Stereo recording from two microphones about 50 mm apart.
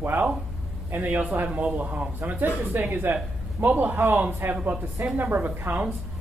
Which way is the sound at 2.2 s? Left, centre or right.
Right.